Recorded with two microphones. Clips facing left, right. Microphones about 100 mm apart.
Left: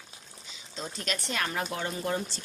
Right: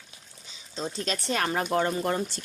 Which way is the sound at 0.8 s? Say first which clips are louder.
Right 4 dB; 30° right (ahead or behind).